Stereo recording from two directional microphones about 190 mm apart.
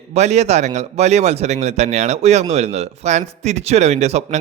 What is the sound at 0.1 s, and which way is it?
Speech, 35° right (ahead or behind).